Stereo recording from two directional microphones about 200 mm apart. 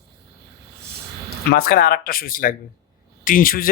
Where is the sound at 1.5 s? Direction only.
50° left (ahead or behind).